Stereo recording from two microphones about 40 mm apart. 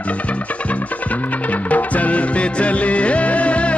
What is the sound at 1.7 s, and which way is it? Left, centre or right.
Music, left.